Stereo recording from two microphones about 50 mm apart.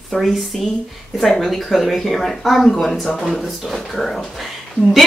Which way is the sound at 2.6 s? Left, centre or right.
Centre.